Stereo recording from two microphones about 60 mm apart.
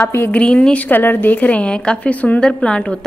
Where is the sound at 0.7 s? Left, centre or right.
Left; by 3.1 s centre.